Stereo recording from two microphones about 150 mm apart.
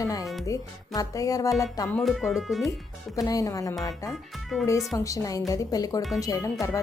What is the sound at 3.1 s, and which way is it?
Speech, 25° left (ahead or behind).